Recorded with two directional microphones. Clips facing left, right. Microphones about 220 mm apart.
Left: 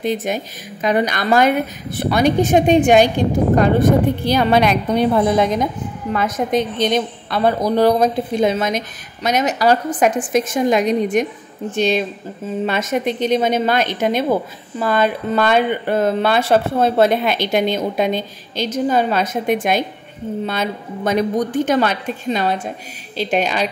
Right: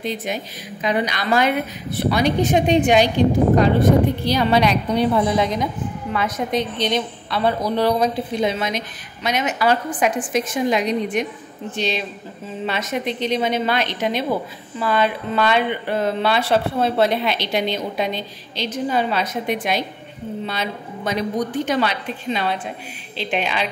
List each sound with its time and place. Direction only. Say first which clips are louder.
0.0 s a woman's voice: left 5 dB; 50° left (ahead or behind)
4.3 s a woman's voice: left 4 dB; 50° left (ahead or behind)